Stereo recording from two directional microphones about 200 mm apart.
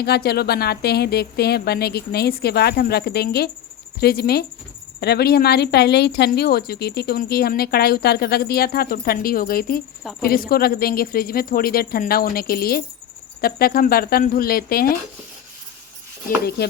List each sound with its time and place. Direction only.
0.0 s speech: 50° left (ahead or behind)
10.0 s speech: centre (ahead or behind)
10.2 s speech: 45° left (ahead or behind)